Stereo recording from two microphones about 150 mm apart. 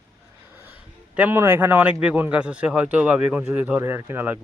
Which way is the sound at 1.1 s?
15° right (ahead or behind).